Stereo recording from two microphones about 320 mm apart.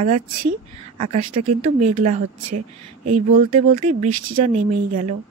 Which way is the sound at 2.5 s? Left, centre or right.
Right.